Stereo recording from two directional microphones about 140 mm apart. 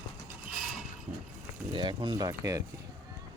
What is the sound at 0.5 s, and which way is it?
Mechanisms, 5° right (ahead or behind).